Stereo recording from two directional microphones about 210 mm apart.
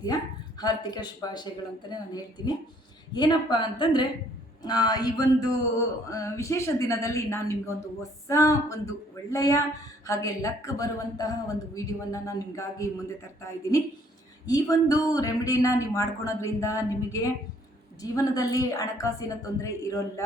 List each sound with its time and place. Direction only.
0.6 s a woman's voice: 20° left (ahead or behind)